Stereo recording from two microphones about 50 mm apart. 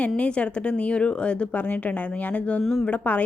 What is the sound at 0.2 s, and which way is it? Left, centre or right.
A woman's voice, left.